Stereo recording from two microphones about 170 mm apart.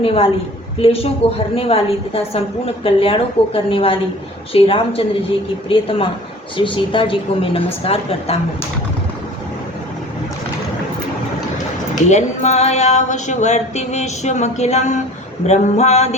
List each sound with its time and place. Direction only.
0.0 s a woman's voice: 35° left (ahead or behind)
12.0 s a sound: 45° left (ahead or behind)
15.4 s a woman's voice: 45° left (ahead or behind)